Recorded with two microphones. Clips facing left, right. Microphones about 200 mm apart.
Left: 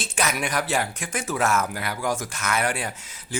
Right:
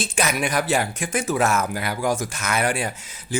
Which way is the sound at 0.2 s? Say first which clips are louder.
Right 3 dB; 10° right (ahead or behind).